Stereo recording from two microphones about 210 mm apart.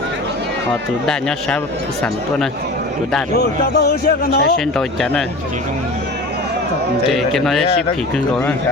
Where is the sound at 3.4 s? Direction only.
50° left (ahead or behind).